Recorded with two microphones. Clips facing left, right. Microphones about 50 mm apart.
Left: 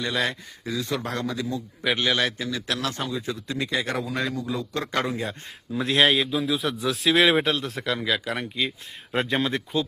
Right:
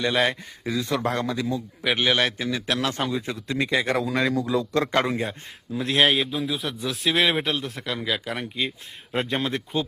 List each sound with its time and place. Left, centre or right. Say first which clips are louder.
0.0 s a man's voice: right 4 dB; right
0.9 s a man's voice: right 6 dB; right
1.2 s a man's voice: right 2 dB; right
2.0 s a man's voice: right 3 dB; centre
2.4 s a man's voice: right 3 dB; right
3.9 s a man's voice: right 4 dB; right
4.3 s a man's voice: right 5 dB; right
4.9 s a man's voice: right 3 dB; right
5.3 s a man's voice: even; centre